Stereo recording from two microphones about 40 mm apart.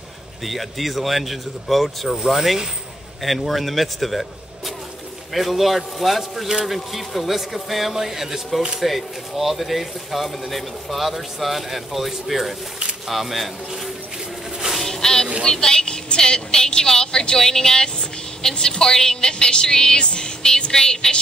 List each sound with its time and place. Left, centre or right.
0.4 s a man's voice: centre
14.8 s a sound: centre
15.4 s a woman's voice: centre